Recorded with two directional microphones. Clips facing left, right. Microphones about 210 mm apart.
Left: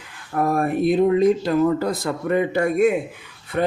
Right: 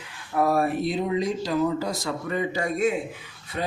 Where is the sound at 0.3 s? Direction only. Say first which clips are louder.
Left 2 dB; 50° left (ahead or behind).